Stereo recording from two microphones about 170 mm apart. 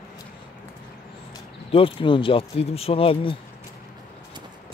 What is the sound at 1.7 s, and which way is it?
Speech, 30° left (ahead or behind).